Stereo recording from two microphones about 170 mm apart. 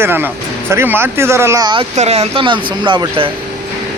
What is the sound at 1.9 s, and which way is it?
Speech, 40° right (ahead or behind).